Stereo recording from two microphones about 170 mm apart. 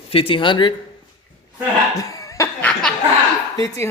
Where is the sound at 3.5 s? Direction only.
20° left (ahead or behind).